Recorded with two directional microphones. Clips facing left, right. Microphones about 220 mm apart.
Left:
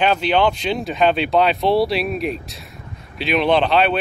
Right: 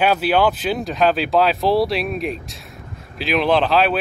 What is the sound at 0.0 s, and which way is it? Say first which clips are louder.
Speech: even; 5° right (ahead or behind).